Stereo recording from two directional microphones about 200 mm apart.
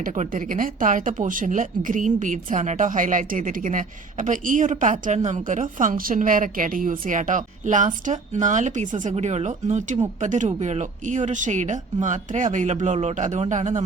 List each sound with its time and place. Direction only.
0.0 s speech: 40° right (ahead or behind)